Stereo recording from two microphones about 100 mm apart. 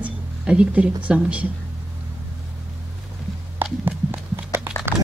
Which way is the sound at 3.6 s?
20° right (ahead or behind).